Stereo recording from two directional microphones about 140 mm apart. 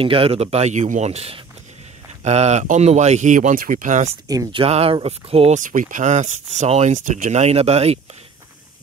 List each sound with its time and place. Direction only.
0.0 s speech: 40° right (ahead or behind); by 4.1 s 65° right (ahead or behind)
4.5 s speech: 40° right (ahead or behind)
5.6 s speech: 70° right (ahead or behind); by 8.0 s 45° right (ahead or behind)